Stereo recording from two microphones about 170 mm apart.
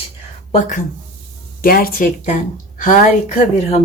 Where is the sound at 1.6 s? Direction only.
60° left (ahead or behind).